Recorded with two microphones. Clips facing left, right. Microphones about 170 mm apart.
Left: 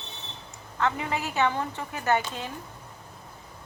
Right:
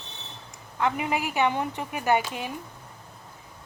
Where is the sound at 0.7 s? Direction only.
15° right (ahead or behind).